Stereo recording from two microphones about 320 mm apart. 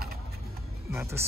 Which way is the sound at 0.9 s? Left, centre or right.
Centre.